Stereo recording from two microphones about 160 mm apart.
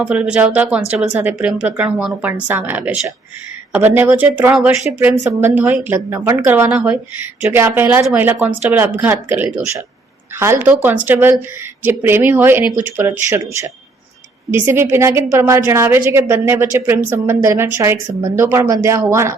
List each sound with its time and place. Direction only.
0.0 s a woman's voice: 5° right (ahead or behind)